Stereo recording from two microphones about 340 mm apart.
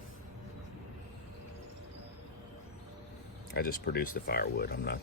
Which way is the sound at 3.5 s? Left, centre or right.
Left.